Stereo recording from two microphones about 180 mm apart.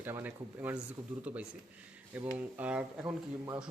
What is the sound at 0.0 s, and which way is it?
Speech, 10° right (ahead or behind).